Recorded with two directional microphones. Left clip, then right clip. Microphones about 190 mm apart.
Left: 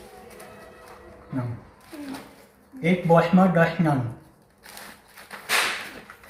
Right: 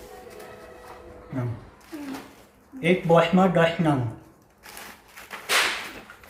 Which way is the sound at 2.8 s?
15° right (ahead or behind).